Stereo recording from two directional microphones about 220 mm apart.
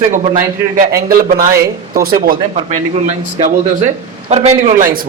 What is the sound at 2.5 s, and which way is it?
A man's voice, 25° right (ahead or behind).